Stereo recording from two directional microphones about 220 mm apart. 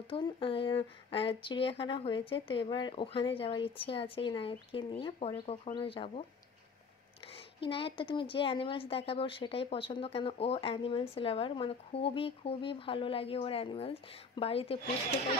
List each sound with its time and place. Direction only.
0.1 s speech: 25° left (ahead or behind)
7.6 s speech: 25° left (ahead or behind)